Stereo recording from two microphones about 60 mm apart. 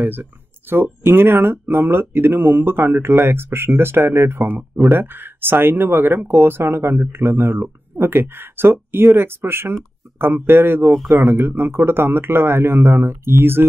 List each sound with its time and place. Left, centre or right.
0.0 s speech: right